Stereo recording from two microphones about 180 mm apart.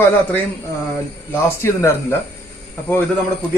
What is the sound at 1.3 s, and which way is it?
Speech, 15° left (ahead or behind).